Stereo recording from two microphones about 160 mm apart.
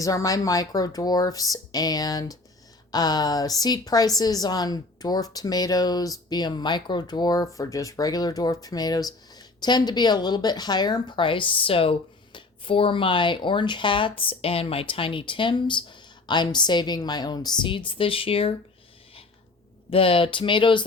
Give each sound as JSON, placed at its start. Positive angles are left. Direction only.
{"t": 0.0, "sound": "a woman's voice", "side_deg": 20}
{"t": 19.9, "sound": "speech", "side_deg": 35}